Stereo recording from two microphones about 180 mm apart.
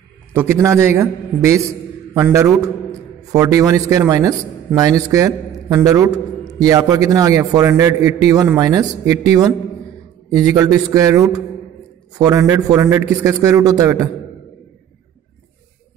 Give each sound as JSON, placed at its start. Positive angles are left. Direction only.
{"t": 0.3, "sound": "a man's voice", "side_deg": -15}